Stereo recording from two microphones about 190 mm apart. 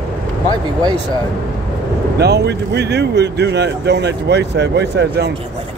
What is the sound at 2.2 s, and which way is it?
Speech, 60° right (ahead or behind).